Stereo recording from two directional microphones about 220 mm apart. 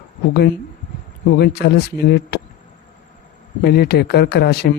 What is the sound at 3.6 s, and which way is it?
Speech, 45° left (ahead or behind).